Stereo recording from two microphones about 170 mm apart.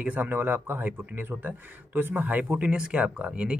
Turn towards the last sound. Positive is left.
turn(degrees=-5)  # may be behind; listen again after turning